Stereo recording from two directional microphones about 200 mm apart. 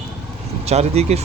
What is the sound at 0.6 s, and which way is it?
Speech, 30° right (ahead or behind).